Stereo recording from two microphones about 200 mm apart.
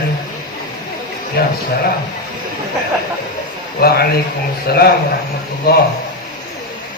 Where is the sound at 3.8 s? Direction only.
50° left (ahead or behind).